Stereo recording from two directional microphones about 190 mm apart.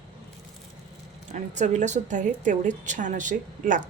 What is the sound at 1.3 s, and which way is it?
A woman's voice, 40° right (ahead or behind).